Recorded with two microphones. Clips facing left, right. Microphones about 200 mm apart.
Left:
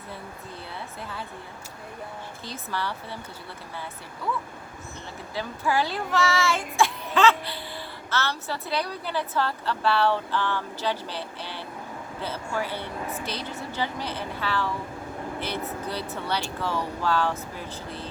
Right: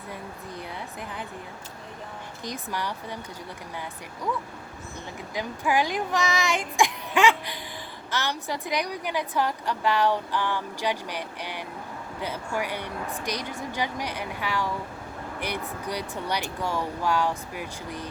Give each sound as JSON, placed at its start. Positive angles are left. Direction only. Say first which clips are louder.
{"t": 2.4, "sound": "a woman's voice", "louder": "right 1 dB", "side_deg": -15}
{"t": 5.3, "sound": "a woman's voice", "louder": "right 1 dB", "side_deg": -15}